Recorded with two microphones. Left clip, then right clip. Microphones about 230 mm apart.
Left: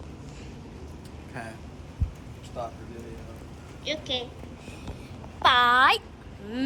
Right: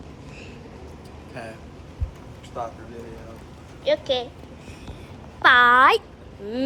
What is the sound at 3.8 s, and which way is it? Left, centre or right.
Speech, right.